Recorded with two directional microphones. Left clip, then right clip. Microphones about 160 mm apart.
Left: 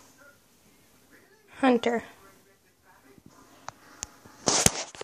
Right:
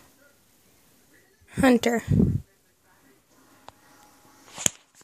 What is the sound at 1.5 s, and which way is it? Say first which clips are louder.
Speech: right 3 dB; 80° right.